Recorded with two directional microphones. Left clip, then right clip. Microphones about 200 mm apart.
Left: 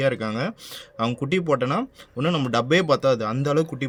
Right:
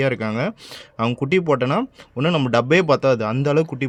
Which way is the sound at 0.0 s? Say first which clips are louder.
Right 2 dB; 45° right (ahead or behind).